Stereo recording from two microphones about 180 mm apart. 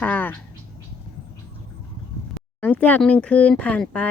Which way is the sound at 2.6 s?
10° left (ahead or behind).